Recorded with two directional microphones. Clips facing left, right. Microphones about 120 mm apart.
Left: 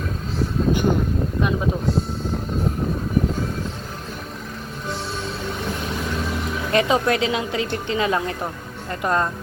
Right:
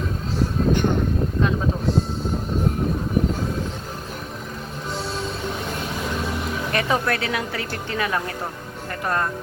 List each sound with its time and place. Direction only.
6.7 s a woman's voice: 20° left (ahead or behind)